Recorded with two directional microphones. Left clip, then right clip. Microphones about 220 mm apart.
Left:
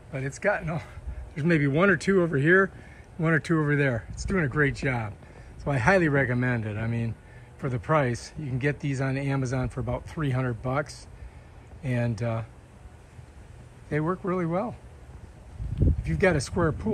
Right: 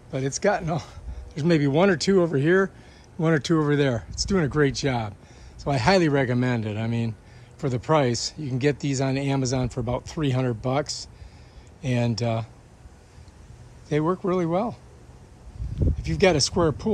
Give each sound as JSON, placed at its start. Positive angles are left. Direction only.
{"t": 0.1, "sound": "speech", "side_deg": -20}
{"t": 3.2, "sound": "speech", "side_deg": -10}
{"t": 13.8, "sound": "speech", "side_deg": -15}
{"t": 16.1, "sound": "speech", "side_deg": -15}